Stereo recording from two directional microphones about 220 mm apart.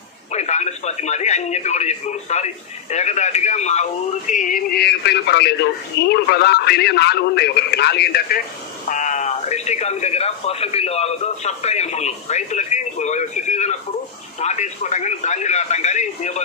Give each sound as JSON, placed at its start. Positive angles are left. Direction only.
{"t": 0.3, "sound": "a man's voice", "side_deg": 30}
{"t": 8.8, "sound": "speech", "side_deg": 35}